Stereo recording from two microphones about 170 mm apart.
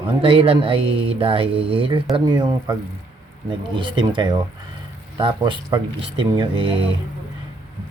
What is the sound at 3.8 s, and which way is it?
Speech, 30° right (ahead or behind).